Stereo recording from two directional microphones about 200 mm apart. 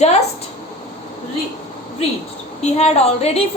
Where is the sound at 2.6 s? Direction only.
30° left (ahead or behind).